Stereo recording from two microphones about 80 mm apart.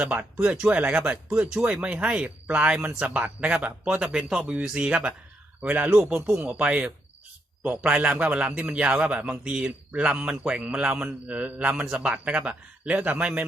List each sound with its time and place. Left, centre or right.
0.2 s a man's voice: centre
6.3 s a man's voice: right